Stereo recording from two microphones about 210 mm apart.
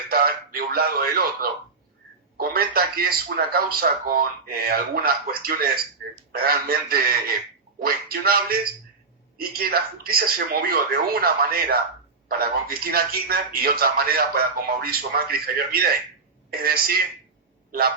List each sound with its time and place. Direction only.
0.1 s a man's voice: 45° right (ahead or behind)
12.4 s a man's voice: 45° right (ahead or behind)